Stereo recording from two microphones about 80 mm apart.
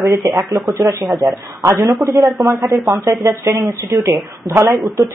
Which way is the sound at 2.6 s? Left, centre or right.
Right.